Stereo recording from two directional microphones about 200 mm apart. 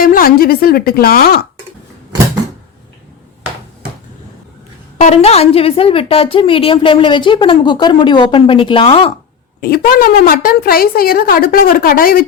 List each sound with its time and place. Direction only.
0.0 s a woman's voice: 45° left (ahead or behind)
4.9 s a woman's voice: 30° left (ahead or behind)
9.6 s a woman's voice: 50° left (ahead or behind)